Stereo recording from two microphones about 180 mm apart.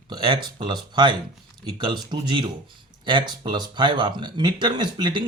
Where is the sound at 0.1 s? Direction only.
25° right (ahead or behind).